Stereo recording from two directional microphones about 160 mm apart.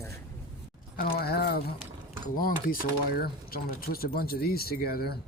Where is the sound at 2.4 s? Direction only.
65° left (ahead or behind).